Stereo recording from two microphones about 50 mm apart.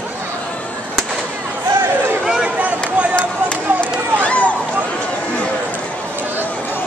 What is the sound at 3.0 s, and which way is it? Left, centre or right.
Run, right.